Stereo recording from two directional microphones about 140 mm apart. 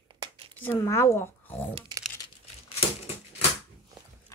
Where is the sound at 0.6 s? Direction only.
15° left (ahead or behind).